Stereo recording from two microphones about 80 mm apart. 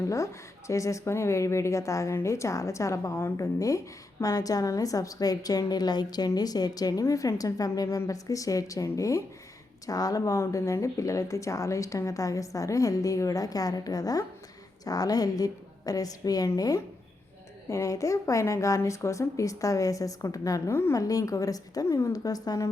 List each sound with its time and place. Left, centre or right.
0.0 s a woman's voice: left
7.0 s a woman's voice: left
20.9 s speech: left